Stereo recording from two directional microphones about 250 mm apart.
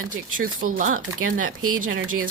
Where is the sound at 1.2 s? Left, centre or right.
Right.